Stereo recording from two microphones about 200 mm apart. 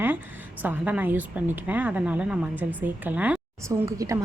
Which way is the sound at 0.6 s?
10° right (ahead or behind).